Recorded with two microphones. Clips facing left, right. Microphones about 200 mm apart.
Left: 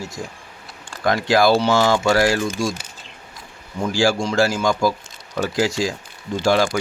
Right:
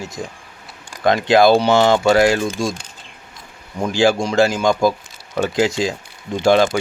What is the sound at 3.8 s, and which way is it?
Speech, 20° right (ahead or behind).